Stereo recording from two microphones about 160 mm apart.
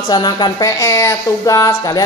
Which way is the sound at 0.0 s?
25° left (ahead or behind).